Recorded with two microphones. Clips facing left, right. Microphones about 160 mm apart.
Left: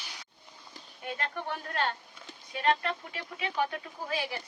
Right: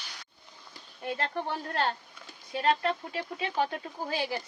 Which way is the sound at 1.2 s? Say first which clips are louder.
Right 3 dB; 30° right (ahead or behind).